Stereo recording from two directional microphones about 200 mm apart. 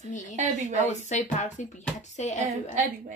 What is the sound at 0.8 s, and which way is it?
A woman's voice, 35° left (ahead or behind).